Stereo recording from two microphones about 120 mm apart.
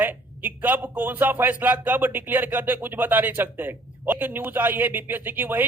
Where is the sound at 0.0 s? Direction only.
15° right (ahead or behind).